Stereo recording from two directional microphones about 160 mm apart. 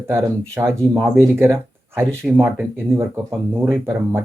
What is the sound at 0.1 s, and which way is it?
Speech, 15° right (ahead or behind).